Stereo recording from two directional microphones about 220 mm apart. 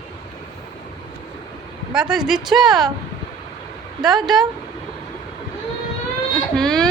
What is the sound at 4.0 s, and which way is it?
Speech, centre (ahead or behind).